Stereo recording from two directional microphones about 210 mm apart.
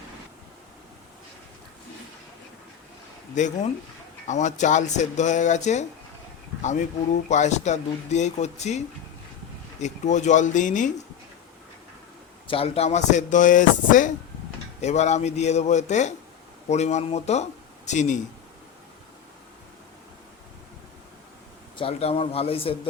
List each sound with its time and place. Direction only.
3.3 s speech: 35° left (ahead or behind)
7.3 s speech: 35° left (ahead or behind)
9.8 s speech: 35° left (ahead or behind)
12.5 s speech: 25° left (ahead or behind)
21.8 s speech: 25° left (ahead or behind)